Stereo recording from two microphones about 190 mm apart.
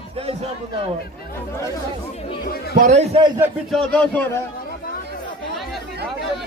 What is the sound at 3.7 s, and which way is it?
Speech, 5° left (ahead or behind).